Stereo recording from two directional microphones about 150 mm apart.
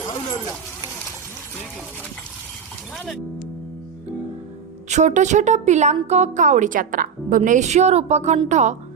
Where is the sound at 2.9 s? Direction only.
Centre (ahead or behind).